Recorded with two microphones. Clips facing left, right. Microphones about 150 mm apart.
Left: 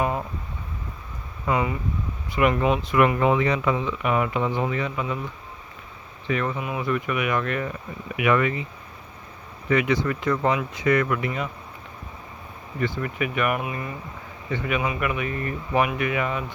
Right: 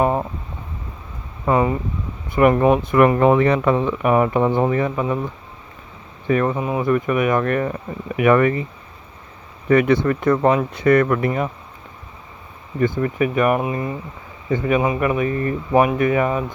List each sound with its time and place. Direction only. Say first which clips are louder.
0.0 s a sound: right 7 dB; 40° right (ahead or behind)
1.5 s speech: right 6 dB; 40° right (ahead or behind)
6.2 s speech: right 7 dB; 40° right (ahead or behind)
9.6 s speech: right 7 dB; 50° right (ahead or behind)
13.0 s speech: right 7 dB; 35° right (ahead or behind)